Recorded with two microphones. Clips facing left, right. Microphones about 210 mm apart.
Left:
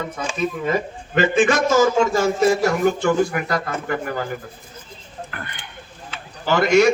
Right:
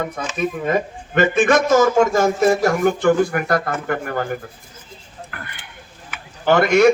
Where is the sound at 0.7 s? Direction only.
55° right (ahead or behind).